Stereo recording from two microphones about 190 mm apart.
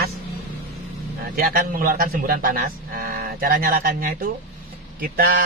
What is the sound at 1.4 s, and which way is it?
A man's voice, 50° right (ahead or behind).